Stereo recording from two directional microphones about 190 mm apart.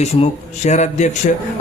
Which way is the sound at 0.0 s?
35° left (ahead or behind).